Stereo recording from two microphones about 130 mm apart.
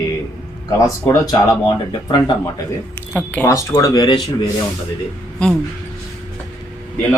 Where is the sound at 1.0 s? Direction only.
30° left (ahead or behind).